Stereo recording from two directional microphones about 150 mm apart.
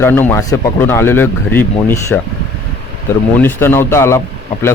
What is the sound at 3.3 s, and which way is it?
Speech, 15° left (ahead or behind).